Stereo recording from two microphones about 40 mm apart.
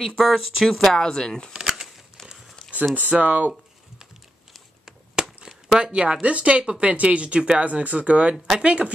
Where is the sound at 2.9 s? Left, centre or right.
Right.